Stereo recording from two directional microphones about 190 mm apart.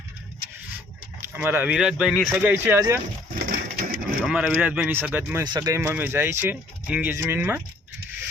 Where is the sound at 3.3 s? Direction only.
50° right (ahead or behind).